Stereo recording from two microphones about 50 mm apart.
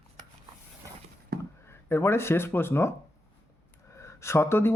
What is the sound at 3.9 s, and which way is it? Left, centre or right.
Speech, left.